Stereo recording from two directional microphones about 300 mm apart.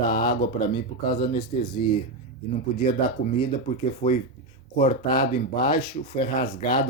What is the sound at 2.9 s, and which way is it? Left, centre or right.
Speech, left.